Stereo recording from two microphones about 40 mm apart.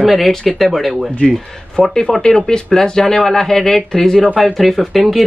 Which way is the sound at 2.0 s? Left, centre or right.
Centre.